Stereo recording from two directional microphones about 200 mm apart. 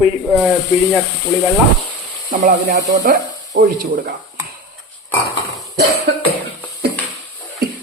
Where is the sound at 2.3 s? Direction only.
40° right (ahead or behind).